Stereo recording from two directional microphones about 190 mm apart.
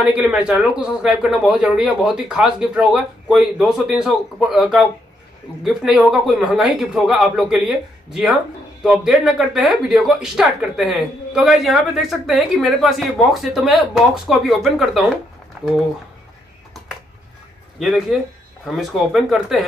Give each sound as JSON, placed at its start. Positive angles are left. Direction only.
{"t": 0.0, "sound": "speech", "side_deg": -5}
{"t": 17.7, "sound": "speech", "side_deg": 0}